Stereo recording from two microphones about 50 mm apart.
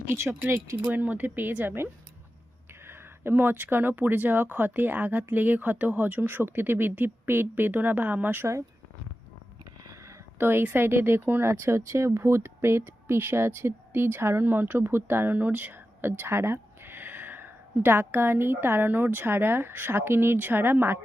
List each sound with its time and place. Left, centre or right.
0.1 s speech: right
0.4 s speech: right
0.8 s speech: right
10.3 s a woman's voice: right
11.5 s speech: right
16.0 s speech: right